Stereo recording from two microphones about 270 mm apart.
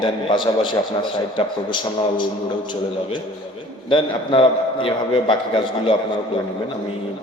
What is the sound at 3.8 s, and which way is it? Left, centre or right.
A man's voice, centre.